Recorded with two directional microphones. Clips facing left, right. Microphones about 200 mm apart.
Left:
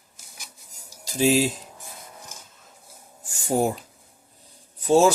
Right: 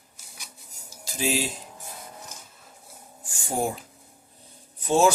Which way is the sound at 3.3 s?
40° left (ahead or behind).